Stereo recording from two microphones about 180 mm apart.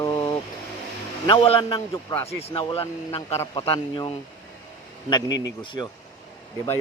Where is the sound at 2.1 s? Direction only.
15° left (ahead or behind).